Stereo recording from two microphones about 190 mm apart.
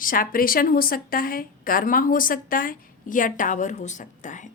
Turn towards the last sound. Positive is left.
turn(degrees=40)  # may be behind; listen again after turning